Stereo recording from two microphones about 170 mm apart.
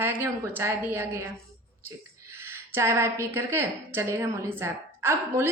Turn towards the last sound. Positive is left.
turn(degrees=-15)  # may be behind; listen again after turning